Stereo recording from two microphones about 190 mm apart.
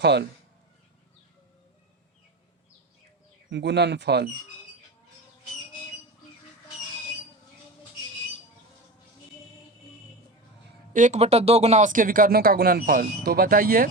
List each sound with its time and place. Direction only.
0.0 s speech: 60° right (ahead or behind)
3.5 s speech: 65° right (ahead or behind)
10.9 s speech: 40° right (ahead or behind)